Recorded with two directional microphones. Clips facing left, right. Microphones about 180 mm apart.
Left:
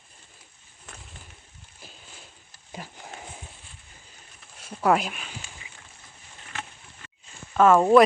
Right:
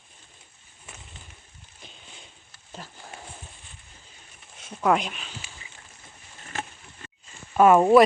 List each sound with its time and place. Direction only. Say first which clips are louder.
0.9 s a sound: left 1 dB; 5° right (ahead or behind); by 3.2 s 10° left (ahead or behind)
4.7 s speech: left 1 dB; 5° left (ahead or behind)
6.5 s insect: right 4 dB; 40° right (ahead or behind)
7.5 s speech: right 1 dB; 10° right (ahead or behind)